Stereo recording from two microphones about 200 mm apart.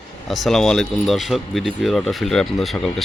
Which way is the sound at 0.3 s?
Centre (ahead or behind).